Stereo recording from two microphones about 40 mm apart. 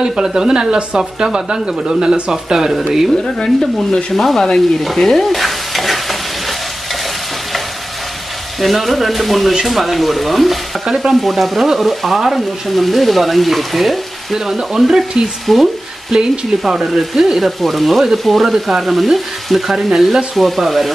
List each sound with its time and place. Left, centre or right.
0.0 s speech: centre
2.3 s speech: centre
3.3 s speech: centre
4.9 s stir: centre
8.5 s speech: centre
15.4 s frying: centre
16.6 s speech: centre